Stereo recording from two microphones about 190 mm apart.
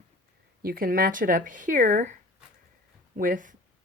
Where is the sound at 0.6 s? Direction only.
50° right (ahead or behind).